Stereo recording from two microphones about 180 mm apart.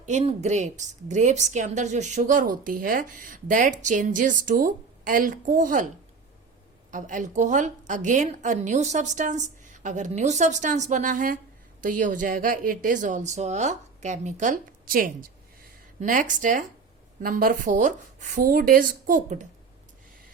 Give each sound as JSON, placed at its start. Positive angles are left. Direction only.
{"t": 0.0, "sound": "a woman's voice", "side_deg": -40}
{"t": 6.9, "sound": "a woman's voice", "side_deg": -45}